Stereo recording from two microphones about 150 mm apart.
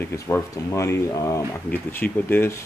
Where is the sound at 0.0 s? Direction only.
15° left (ahead or behind).